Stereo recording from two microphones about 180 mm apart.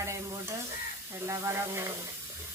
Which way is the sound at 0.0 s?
15° right (ahead or behind).